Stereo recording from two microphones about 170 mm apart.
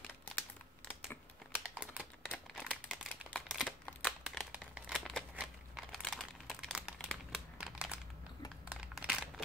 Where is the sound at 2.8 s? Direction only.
Centre (ahead or behind).